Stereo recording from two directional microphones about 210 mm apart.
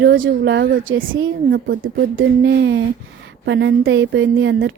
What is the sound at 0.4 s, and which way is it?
Speech, 55° right (ahead or behind).